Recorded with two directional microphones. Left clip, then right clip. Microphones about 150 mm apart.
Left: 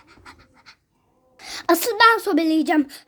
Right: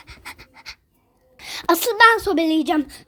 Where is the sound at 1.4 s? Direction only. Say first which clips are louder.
Even; 10° left (ahead or behind).